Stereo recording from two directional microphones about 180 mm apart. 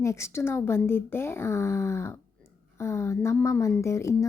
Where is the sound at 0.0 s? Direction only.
15° left (ahead or behind).